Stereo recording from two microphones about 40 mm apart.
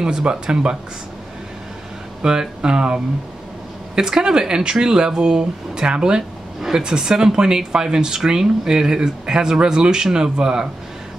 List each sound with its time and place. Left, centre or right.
0.0 s speech: centre
2.2 s speech: centre